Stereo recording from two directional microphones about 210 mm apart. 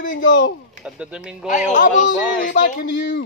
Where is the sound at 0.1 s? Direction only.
60° left (ahead or behind).